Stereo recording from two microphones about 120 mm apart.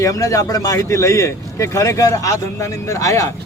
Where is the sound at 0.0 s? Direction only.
30° left (ahead or behind).